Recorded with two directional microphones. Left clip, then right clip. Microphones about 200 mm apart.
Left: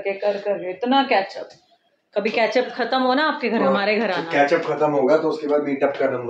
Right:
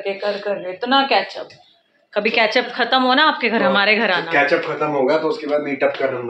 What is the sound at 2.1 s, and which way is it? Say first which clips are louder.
Speech: right 3 dB; centre (ahead or behind).